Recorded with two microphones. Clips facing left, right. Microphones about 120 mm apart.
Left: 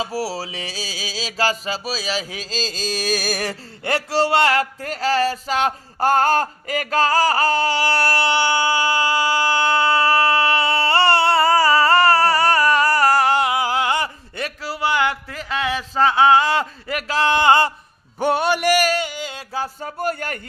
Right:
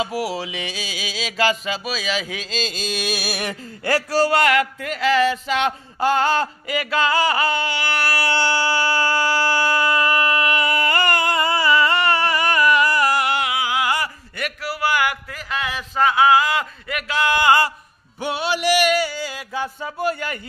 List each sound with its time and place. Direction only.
0.0 s music: 35° left (ahead or behind)
3.8 s speech: 25° left (ahead or behind)
13.8 s a sound: 25° left (ahead or behind)
18.2 s speech: 50° left (ahead or behind)
18.9 s music: 20° left (ahead or behind)
19.5 s speech: 40° left (ahead or behind)